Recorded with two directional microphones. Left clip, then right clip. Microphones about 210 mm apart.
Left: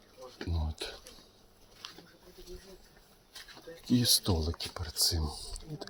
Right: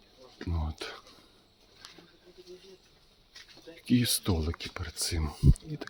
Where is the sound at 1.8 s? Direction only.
55° left (ahead or behind).